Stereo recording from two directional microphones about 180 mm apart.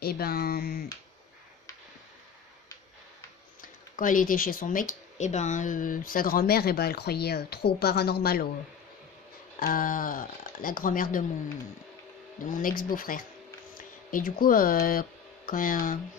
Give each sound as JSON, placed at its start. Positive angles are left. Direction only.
{"t": 0.0, "sound": "speech", "side_deg": 60}
{"t": 3.9, "sound": "speech", "side_deg": 50}
{"t": 9.6, "sound": "speech", "side_deg": 50}
{"t": 12.4, "sound": "speech", "side_deg": 50}